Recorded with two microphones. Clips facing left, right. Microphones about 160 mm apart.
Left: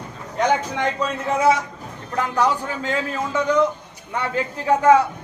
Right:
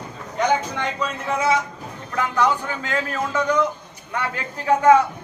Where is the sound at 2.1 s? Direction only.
35° left (ahead or behind).